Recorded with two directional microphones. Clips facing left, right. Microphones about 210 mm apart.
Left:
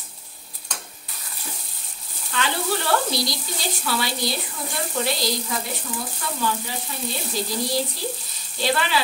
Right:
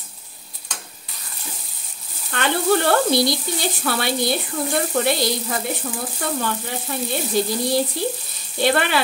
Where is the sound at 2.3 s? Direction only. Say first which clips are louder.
Right 6 dB; 55° right (ahead or behind).